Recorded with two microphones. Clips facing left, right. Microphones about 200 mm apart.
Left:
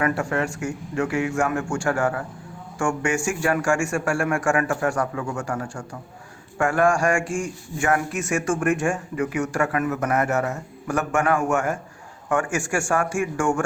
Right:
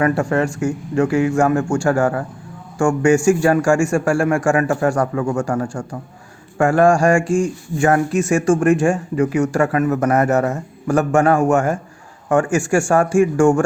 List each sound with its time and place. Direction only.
0.0 s speech: 35° right (ahead or behind)